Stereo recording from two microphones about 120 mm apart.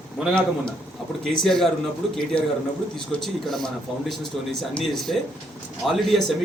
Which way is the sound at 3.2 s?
5° left (ahead or behind).